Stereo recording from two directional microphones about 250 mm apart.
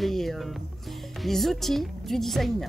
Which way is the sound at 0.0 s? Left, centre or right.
Centre.